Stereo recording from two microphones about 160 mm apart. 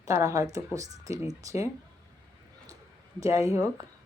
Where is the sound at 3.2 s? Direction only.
20° right (ahead or behind).